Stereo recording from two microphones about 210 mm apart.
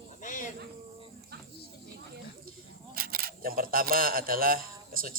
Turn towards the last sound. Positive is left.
turn(degrees=-45)  # may be behind; listen again after turning